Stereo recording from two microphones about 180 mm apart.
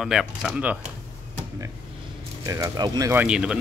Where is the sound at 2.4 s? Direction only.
20° right (ahead or behind).